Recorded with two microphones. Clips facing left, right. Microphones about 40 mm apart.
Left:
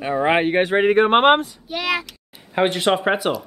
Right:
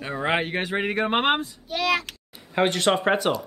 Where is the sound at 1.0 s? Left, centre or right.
Left.